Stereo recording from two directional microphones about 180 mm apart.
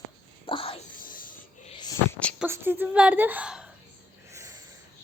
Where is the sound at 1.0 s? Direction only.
50° left (ahead or behind).